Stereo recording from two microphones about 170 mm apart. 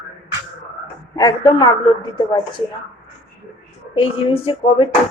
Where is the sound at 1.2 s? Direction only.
25° left (ahead or behind).